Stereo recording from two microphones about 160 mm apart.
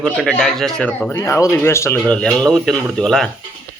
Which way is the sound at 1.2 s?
20° left (ahead or behind).